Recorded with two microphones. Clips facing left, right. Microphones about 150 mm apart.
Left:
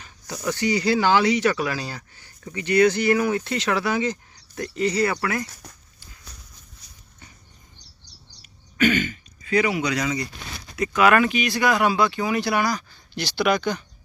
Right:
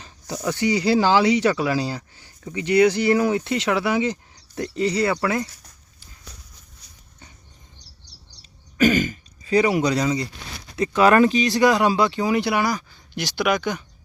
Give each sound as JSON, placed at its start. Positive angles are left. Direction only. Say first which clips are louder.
{"t": 0.0, "sound": "speech", "louder": "right 2 dB", "side_deg": -25}
{"t": 8.4, "sound": "throat clearing", "louder": "right 3 dB", "side_deg": -40}
{"t": 10.8, "sound": "speech", "louder": "right 3 dB", "side_deg": -30}
{"t": 12.6, "sound": "speech", "louder": "right 1 dB", "side_deg": -10}